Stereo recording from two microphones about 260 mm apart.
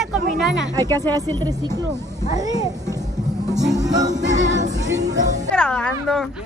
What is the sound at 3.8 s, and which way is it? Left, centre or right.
Music, centre.